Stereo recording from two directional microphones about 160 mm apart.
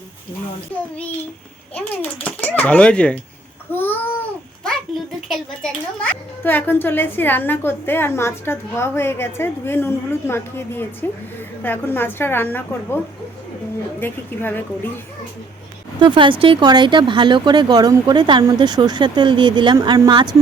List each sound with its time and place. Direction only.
0.7 s a child's voice: 10° left (ahead or behind)
3.7 s babbling: 10° left (ahead or behind)
5.3 s a child's voice: 5° left (ahead or behind)
14.0 s a child's voice: 10° left (ahead or behind)
16.0 s speech: 30° right (ahead or behind)